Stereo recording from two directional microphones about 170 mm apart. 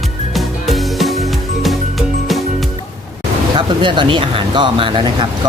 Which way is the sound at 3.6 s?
30° right (ahead or behind).